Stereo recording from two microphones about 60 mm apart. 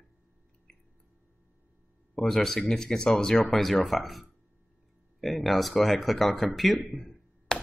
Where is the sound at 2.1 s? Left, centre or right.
Centre.